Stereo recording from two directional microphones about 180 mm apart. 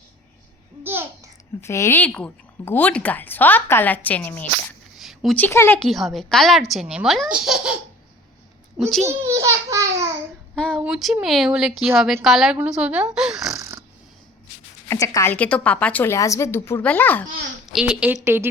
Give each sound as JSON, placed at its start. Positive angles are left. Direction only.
{"t": 0.9, "sound": "babbling", "side_deg": -10}
{"t": 1.6, "sound": "a woman's voice", "side_deg": 15}
{"t": 9.0, "sound": "a child's voice", "side_deg": -15}
{"t": 10.5, "sound": "a sound", "side_deg": 5}
{"t": 10.8, "sound": "a woman's voice", "side_deg": -5}
{"t": 13.5, "sound": "snoring", "side_deg": -15}
{"t": 14.8, "sound": "speech", "side_deg": 15}
{"t": 17.7, "sound": "a child's voice", "side_deg": -5}